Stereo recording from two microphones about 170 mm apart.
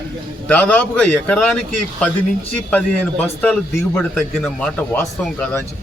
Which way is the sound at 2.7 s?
10° left (ahead or behind).